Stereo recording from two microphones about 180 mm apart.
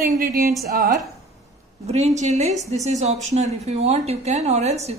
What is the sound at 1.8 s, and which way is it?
A woman's voice, 35° right (ahead or behind).